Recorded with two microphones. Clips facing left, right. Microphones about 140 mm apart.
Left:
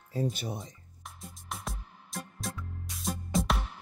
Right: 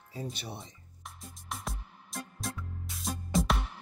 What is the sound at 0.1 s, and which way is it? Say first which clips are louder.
Speech: left 7 dB; 45° left (ahead or behind).